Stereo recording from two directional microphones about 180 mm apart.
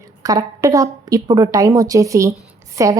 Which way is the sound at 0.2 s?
20° right (ahead or behind).